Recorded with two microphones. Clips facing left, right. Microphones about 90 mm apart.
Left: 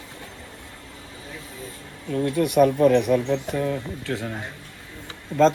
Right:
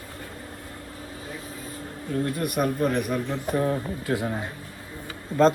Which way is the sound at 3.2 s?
75° left (ahead or behind).